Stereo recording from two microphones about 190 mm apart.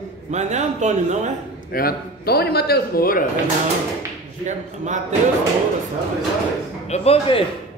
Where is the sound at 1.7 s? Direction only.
55° left (ahead or behind).